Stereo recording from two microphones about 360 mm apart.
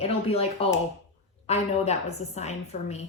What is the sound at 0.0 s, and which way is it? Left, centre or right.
A woman's voice, centre.